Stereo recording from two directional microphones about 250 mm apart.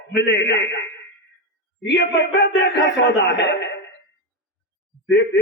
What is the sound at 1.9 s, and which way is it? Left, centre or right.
A man's voice, left.